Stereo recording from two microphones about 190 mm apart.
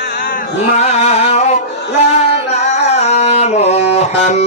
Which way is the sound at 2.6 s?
35° left (ahead or behind).